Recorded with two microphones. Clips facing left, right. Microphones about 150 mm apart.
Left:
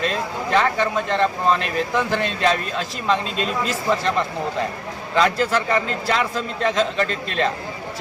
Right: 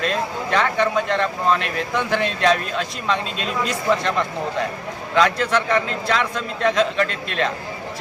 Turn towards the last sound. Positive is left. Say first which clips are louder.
# left 1 dB
turn(degrees=35)  # may be behind; listen again after turning